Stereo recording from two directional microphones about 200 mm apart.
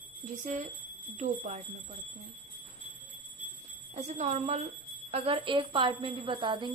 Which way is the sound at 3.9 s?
35° right (ahead or behind).